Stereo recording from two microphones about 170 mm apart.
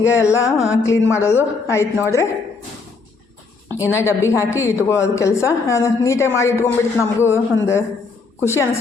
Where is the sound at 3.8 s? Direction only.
15° left (ahead or behind).